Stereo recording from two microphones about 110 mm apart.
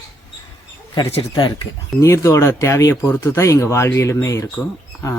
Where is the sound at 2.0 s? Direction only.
25° left (ahead or behind).